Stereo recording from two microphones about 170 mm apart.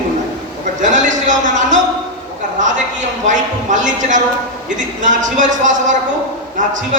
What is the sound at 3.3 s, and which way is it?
A man's voice, 50° right (ahead or behind).